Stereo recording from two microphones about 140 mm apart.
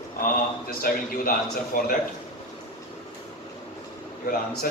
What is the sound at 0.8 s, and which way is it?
A man's voice, 90° left.